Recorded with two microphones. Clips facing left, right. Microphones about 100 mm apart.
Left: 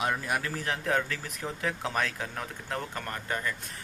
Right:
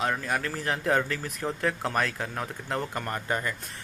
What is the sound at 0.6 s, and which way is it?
Speech, 5° right (ahead or behind).